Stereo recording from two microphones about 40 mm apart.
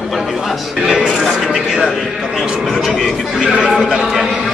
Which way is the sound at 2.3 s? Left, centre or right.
Centre.